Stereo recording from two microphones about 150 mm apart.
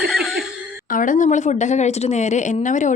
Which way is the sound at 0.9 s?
60° left (ahead or behind).